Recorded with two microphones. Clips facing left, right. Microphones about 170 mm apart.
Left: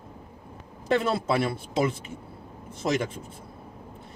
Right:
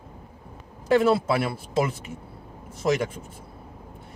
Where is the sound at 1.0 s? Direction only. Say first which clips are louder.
Right 3 dB; 5° right (ahead or behind).